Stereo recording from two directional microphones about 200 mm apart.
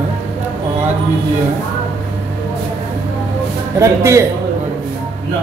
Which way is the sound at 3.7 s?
15° right (ahead or behind).